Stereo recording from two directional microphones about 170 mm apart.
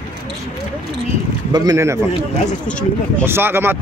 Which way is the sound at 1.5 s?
20° right (ahead or behind).